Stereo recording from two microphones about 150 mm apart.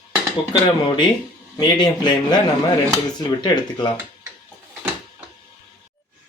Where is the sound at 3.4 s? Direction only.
30° left (ahead or behind).